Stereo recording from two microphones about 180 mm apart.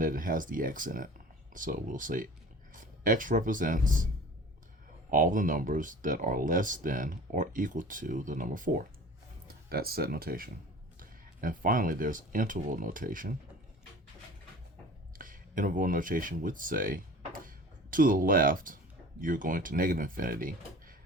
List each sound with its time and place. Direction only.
0.0 s speech: 50° right (ahead or behind)
5.1 s speech: 50° right (ahead or behind)
15.2 s speech: 50° right (ahead or behind)